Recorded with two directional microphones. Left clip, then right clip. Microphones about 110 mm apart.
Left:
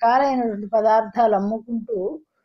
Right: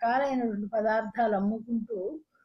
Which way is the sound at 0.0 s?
15° left (ahead or behind).